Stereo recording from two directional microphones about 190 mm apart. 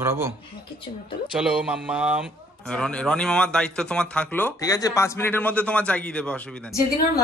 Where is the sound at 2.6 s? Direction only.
5° left (ahead or behind).